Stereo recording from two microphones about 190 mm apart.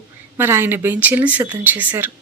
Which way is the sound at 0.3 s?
10° right (ahead or behind).